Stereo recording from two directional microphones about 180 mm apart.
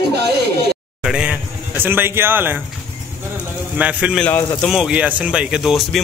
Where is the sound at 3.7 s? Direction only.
5° right (ahead or behind).